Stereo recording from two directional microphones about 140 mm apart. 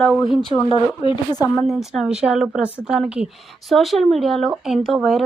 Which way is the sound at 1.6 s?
Centre (ahead or behind).